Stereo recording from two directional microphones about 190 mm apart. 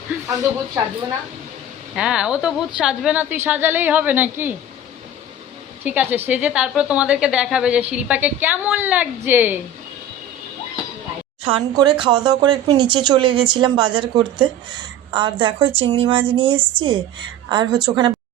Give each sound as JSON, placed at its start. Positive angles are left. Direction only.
{"t": 2.0, "sound": "a woman's voice", "side_deg": -5}
{"t": 5.8, "sound": "a woman's voice", "side_deg": -10}
{"t": 11.4, "sound": "speech", "side_deg": -25}